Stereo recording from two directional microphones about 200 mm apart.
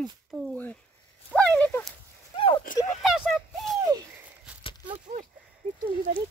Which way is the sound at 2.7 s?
45° left (ahead or behind).